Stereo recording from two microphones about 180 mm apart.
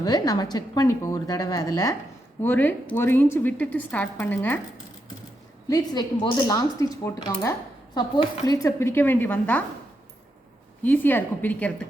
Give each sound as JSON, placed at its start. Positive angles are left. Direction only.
{"t": 0.0, "sound": "a woman's voice", "side_deg": 20}
{"t": 5.6, "sound": "a woman's voice", "side_deg": 20}
{"t": 10.8, "sound": "a woman's voice", "side_deg": 10}